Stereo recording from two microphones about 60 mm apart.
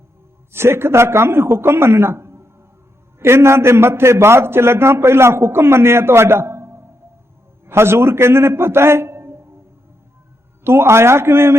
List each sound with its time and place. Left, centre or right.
0.5 s a man's voice: right
10.6 s a man's voice: right